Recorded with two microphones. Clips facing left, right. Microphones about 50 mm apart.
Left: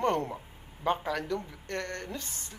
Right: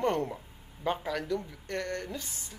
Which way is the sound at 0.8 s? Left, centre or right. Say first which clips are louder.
Left 2 dB; centre.